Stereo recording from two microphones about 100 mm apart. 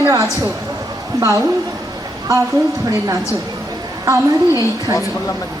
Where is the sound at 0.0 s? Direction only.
30° right (ahead or behind).